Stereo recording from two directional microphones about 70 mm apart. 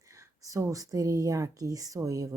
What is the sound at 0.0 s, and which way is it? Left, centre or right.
Speech, right.